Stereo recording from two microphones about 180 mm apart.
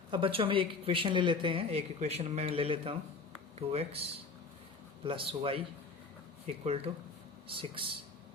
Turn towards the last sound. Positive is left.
turn(degrees=-30)  # may be behind; listen again after turning